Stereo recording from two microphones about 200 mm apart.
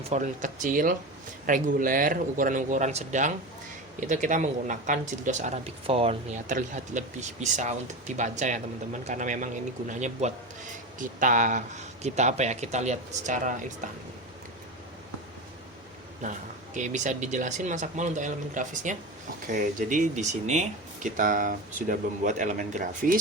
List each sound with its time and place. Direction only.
0.1 s speech: 40° right (ahead or behind)
16.7 s speech: 40° right (ahead or behind)